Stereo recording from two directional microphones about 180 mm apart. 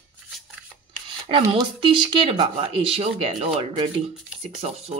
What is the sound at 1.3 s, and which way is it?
Speech, 30° right (ahead or behind).